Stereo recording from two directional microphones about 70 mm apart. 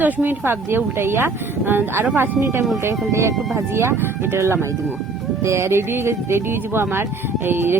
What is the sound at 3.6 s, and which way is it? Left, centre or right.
Speech, right.